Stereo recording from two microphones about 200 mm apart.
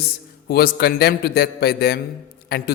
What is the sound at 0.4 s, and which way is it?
A man's voice, 50° left (ahead or behind).